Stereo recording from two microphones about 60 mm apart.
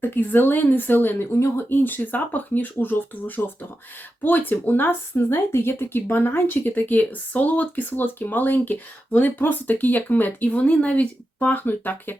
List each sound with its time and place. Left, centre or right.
0.0 s speech: left
1.3 s speech: left
1.7 s speech: left